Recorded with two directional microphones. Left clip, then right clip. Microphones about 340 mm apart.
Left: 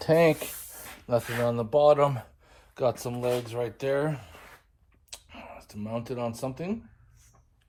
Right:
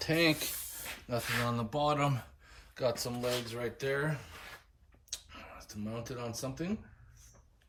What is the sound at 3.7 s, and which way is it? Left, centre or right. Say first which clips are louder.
Speech: left 7 dB; centre.